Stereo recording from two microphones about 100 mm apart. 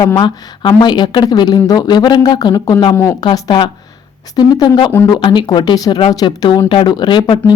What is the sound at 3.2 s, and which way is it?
Speech, 45° left (ahead or behind).